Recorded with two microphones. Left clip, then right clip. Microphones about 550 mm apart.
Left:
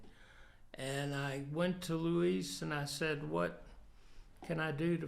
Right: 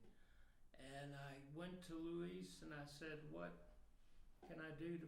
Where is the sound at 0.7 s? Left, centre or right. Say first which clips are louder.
Left 16 dB; left.